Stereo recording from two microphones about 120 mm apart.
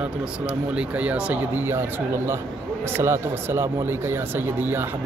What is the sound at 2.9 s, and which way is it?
Speech, 20° right (ahead or behind).